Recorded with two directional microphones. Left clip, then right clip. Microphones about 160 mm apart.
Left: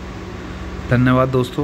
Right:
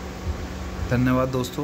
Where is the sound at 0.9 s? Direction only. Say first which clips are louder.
Left 7 dB; 10° left (ahead or behind).